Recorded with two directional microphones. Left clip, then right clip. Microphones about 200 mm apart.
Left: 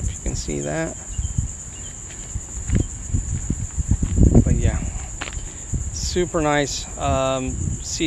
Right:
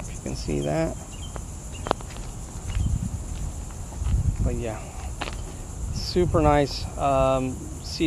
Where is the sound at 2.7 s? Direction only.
5° left (ahead or behind).